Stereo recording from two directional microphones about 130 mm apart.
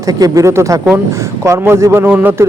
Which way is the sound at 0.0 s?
30° right (ahead or behind).